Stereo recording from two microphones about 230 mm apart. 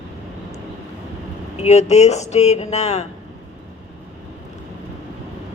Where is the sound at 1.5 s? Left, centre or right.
Left.